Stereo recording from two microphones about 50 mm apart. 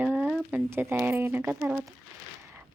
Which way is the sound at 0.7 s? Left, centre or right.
Right.